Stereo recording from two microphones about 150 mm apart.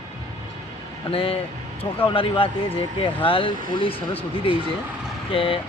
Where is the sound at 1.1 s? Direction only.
35° left (ahead or behind).